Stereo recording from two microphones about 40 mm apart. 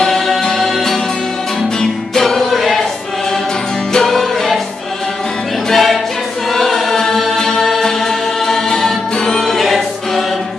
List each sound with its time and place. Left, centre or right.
0.4 s music: centre
1.8 s music: centre
3.9 s music: centre
5.7 s a capella: centre
6.5 s choir: centre
7.8 s music: centre